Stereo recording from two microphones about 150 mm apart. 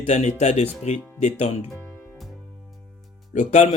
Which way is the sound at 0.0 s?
50° left (ahead or behind).